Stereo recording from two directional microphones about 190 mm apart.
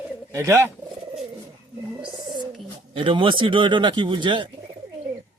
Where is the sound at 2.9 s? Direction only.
25° right (ahead or behind).